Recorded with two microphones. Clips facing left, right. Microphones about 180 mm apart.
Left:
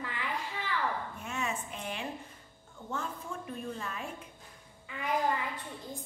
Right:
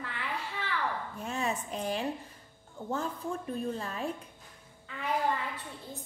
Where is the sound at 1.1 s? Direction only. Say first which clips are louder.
Right 3 dB; 35° right (ahead or behind).